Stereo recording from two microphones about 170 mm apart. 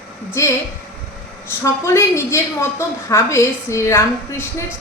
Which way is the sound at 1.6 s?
15° left (ahead or behind).